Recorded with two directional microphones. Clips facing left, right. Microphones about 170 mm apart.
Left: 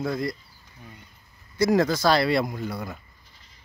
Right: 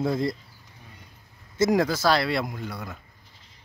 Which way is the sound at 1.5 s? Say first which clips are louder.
Left 1 dB; 20° right (ahead or behind).